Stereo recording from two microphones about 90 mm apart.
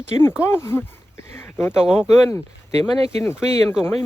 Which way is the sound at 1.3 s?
25° left (ahead or behind).